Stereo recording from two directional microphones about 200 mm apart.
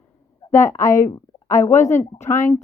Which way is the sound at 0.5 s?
15° left (ahead or behind).